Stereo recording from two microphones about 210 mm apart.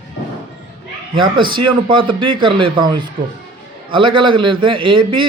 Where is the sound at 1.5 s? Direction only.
25° right (ahead or behind).